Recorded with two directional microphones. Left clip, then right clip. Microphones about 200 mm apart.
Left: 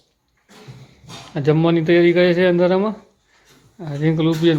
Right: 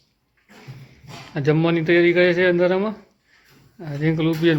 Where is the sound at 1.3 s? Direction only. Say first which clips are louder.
Left 3 dB; 5° left (ahead or behind).